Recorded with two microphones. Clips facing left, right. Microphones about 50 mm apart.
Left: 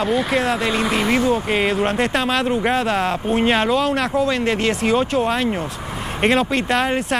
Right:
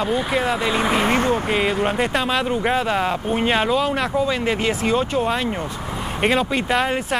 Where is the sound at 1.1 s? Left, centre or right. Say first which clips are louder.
Left 1 dB; right.